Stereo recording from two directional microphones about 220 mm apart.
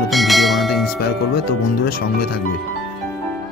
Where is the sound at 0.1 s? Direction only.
Centre (ahead or behind).